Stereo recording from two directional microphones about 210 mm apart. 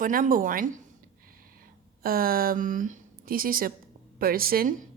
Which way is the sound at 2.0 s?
45° right (ahead or behind).